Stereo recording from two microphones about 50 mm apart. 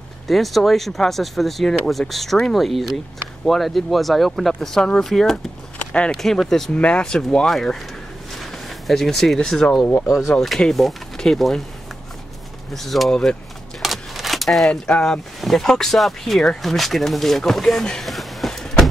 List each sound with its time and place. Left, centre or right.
0.3 s speech: centre
5.8 s a sound: left
6.1 s speech: centre
6.7 s speech: left
8.4 s speech: centre
10.0 s speech: centre
12.7 s speech: centre
13.1 s speech: centre
13.8 s a sound: centre
14.7 s speech: centre
18.0 s a sound: centre
18.5 s vehicle: centre